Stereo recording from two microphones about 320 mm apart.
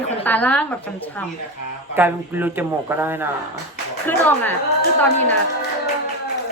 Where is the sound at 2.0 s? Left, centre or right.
Centre.